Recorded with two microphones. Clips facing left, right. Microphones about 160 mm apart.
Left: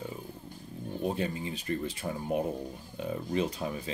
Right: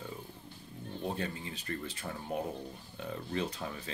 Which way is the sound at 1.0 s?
15° left (ahead or behind).